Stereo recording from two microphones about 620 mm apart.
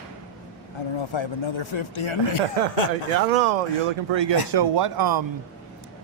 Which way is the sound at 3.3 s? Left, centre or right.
Right.